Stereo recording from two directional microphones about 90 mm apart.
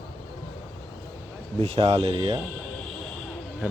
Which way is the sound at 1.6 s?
90° right.